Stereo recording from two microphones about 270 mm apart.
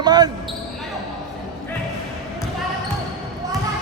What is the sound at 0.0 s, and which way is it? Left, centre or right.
Basketball bounce, centre.